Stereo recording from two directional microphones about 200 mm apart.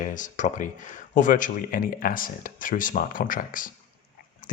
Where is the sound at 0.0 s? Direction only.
40° left (ahead or behind).